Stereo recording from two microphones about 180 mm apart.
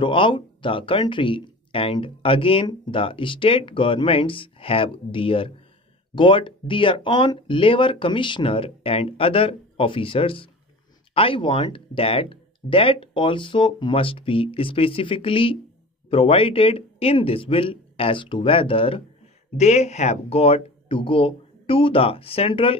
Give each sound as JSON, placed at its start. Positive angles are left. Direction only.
{"t": 0.0, "sound": "speech", "side_deg": 25}